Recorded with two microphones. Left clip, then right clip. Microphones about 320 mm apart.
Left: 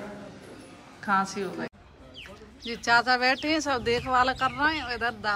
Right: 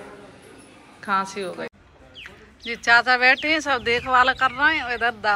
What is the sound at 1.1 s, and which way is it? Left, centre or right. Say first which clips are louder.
Speech: right 2 dB; centre.